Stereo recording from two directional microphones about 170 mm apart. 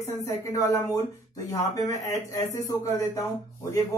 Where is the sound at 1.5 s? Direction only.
20° left (ahead or behind).